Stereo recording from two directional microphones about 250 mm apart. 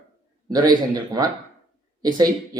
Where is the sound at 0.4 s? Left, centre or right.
Centre.